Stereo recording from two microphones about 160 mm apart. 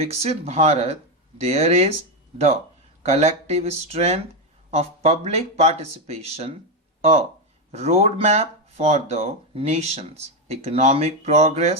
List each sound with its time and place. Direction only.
0.0 s speech: 40° right (ahead or behind)
3.0 s speech: 45° right (ahead or behind)